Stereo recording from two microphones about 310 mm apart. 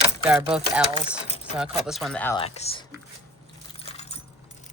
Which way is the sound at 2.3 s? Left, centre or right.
Centre.